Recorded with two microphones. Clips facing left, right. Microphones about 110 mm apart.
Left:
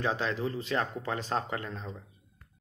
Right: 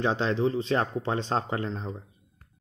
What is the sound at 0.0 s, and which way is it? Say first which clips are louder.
Speech: right 5 dB; 25° right (ahead or behind).